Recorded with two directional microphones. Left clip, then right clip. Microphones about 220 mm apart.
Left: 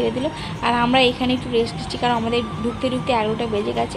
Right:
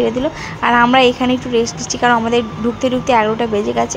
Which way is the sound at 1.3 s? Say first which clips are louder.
Right 5 dB; 45° right (ahead or behind).